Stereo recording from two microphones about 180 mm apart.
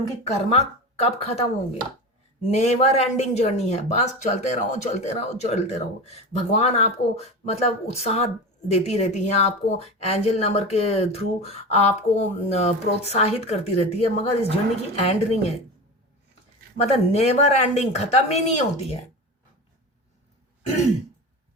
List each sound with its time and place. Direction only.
0.3 s speech: 35° left (ahead or behind)
16.7 s speech: 35° left (ahead or behind)